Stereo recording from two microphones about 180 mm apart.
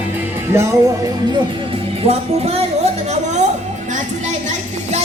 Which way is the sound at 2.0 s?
35° right (ahead or behind).